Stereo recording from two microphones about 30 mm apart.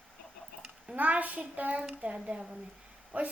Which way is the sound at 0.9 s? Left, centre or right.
Right.